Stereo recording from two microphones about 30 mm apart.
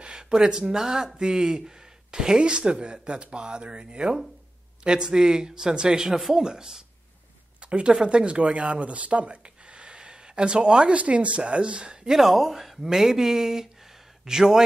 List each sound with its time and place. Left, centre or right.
0.0 s speech: right
7.6 s speech: right
8.4 s speech: right
9.9 s a sound: right
11.0 s speech: right
12.1 s speech: centre